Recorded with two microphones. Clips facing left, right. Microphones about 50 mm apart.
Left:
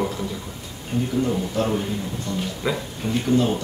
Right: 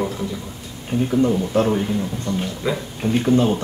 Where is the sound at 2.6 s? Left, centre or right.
Centre.